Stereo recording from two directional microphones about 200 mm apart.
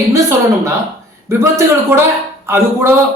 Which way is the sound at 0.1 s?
15° right (ahead or behind).